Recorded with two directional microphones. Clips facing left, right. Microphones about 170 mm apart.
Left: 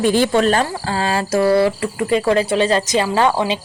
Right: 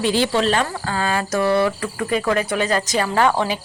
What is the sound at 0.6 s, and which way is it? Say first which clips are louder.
A woman's voice: left 3 dB; 35° left (ahead or behind).